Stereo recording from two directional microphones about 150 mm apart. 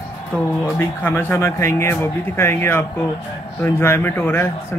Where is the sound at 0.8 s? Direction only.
15° left (ahead or behind).